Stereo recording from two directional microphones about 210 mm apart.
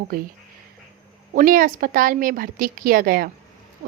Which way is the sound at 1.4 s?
40° right (ahead or behind).